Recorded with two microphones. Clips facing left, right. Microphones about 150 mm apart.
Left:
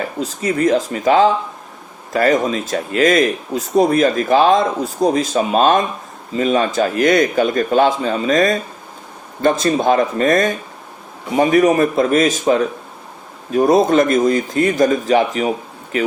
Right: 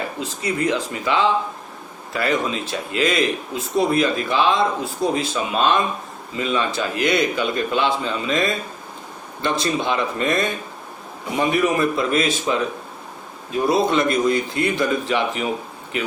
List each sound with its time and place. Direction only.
0.2 s speech: 40° left (ahead or behind)